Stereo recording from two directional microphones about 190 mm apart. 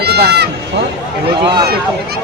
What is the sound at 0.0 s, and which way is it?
Run, 60° right (ahead or behind).